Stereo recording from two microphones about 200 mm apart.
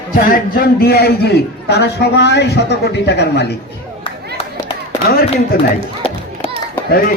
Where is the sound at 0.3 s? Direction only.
50° left (ahead or behind).